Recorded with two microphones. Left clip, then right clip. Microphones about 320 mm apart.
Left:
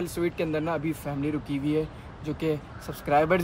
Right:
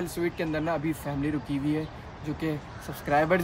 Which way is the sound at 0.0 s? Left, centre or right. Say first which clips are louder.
Left 2 dB; centre.